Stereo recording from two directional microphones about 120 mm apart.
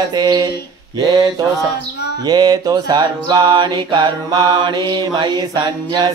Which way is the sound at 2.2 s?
30° right (ahead or behind).